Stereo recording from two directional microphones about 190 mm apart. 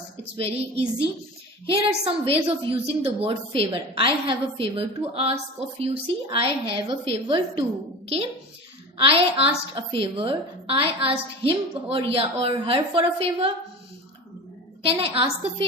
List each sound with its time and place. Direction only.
0.3 s a woman's voice: 30° right (ahead or behind)
9.0 s a woman's voice: 30° right (ahead or behind)
14.8 s a woman's voice: 30° right (ahead or behind)